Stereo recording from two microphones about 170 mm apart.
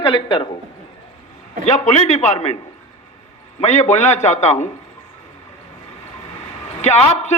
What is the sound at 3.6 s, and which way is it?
A man's voice, 40° left (ahead or behind).